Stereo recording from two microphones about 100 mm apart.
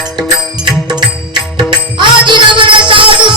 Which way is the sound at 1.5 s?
55° right (ahead or behind).